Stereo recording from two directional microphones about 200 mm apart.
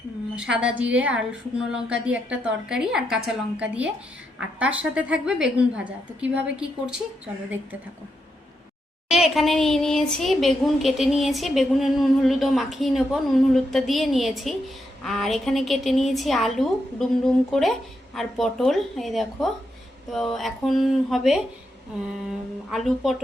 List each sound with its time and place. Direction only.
0.3 s a woman's voice: 5° right (ahead or behind)
9.0 s speech: centre (ahead or behind)